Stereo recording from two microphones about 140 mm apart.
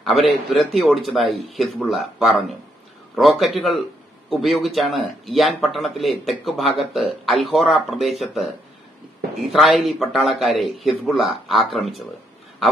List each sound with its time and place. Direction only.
0.5 s speech: centre (ahead or behind)
9.5 s speech: centre (ahead or behind)